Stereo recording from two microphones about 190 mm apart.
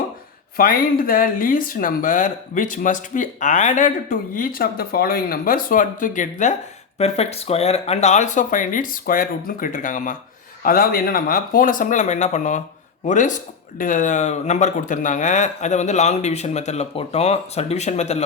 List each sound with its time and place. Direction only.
0.5 s speech: 50° left (ahead or behind)
7.0 s speech: 35° left (ahead or behind)